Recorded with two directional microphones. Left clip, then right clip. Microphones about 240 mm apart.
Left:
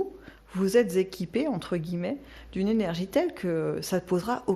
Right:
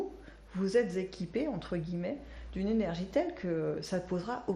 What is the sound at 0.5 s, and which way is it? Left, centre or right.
Speech, left.